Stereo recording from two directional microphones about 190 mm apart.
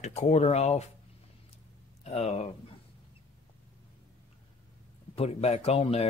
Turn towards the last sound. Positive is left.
turn(degrees=30)  # may be behind; listen again after turning